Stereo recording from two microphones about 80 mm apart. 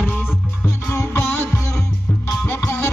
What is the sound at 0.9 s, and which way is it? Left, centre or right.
Music, left.